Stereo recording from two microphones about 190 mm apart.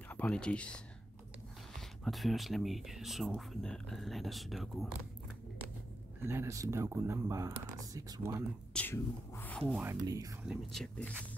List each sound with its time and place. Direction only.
0.1 s speech: 5° left (ahead or behind)
2.0 s speech: centre (ahead or behind)
6.2 s speech: 15° right (ahead or behind)
8.7 s a sound: 10° left (ahead or behind)
9.7 s speech: 5° right (ahead or behind)
10.0 s speech: 20° right (ahead or behind)
10.5 s speech: centre (ahead or behind)